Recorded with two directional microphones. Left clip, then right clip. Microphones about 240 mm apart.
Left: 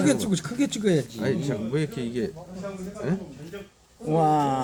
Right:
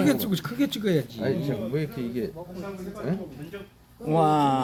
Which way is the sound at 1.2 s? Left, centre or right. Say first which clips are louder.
Even; left.